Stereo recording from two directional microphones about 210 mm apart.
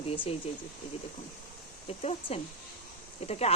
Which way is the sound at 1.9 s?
30° left (ahead or behind).